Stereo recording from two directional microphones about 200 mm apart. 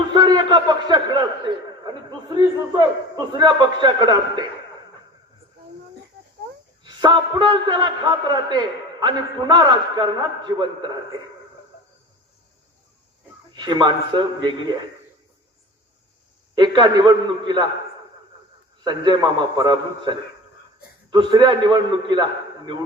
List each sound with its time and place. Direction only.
0.1 s a sound: 20° right (ahead or behind)
6.8 s a man's voice: 20° right (ahead or behind)
13.5 s a man's voice: 20° right (ahead or behind)
16.6 s a man's voice: 20° right (ahead or behind)
18.8 s a man's voice: 20° right (ahead or behind)